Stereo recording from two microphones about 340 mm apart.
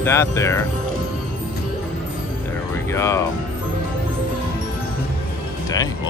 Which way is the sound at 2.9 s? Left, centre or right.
Centre.